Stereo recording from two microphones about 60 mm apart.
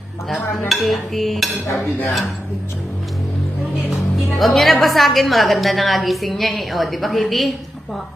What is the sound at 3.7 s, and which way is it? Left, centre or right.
Music, centre.